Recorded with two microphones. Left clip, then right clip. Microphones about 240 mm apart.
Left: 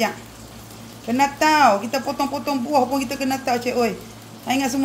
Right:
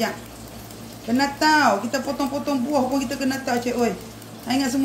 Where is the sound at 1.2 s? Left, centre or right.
Left.